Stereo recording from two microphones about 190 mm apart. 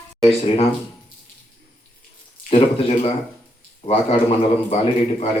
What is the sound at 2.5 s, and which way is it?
A man's voice, 30° left (ahead or behind).